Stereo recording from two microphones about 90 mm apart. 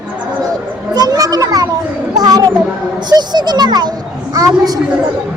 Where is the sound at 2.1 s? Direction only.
45° right (ahead or behind).